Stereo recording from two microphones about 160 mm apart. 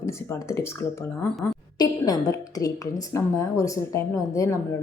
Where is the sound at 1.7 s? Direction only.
25° left (ahead or behind).